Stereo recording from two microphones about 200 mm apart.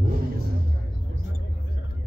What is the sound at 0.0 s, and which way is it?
Music, 50° right (ahead or behind).